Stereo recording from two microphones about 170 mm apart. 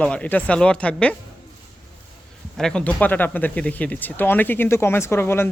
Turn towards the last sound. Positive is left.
turn(degrees=15)  # may be behind; listen again after turning